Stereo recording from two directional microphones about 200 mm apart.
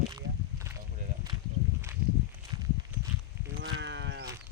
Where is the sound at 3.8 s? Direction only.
60° right (ahead or behind).